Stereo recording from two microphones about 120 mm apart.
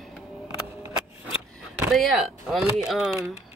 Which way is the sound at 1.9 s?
Centre (ahead or behind).